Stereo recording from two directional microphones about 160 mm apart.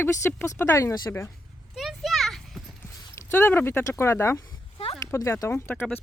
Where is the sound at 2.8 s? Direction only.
15° left (ahead or behind).